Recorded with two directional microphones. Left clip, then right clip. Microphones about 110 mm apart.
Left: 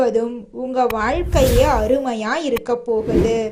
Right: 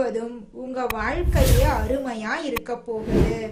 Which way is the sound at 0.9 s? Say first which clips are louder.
Left 7 dB; 60° left (ahead or behind).